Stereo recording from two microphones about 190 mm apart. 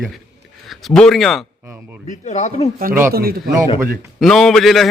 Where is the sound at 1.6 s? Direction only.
10° right (ahead or behind).